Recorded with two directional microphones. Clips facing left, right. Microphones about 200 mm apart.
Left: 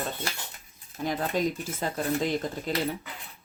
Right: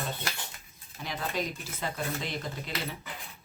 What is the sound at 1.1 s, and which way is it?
Speech, 45° left (ahead or behind).